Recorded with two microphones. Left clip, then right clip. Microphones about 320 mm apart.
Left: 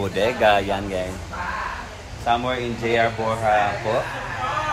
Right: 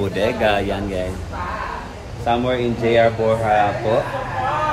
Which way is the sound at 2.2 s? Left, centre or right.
Centre.